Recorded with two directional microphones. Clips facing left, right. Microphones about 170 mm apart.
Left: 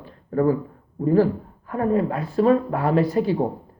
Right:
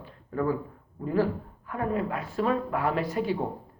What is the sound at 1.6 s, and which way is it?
Speech, 35° left (ahead or behind).